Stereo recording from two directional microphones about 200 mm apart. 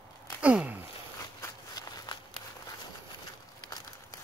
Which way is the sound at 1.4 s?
20° left (ahead or behind).